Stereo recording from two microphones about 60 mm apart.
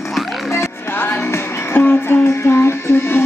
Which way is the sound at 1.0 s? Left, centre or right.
Left.